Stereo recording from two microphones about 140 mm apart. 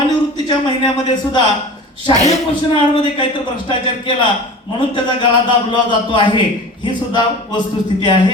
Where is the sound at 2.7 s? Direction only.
35° left (ahead or behind).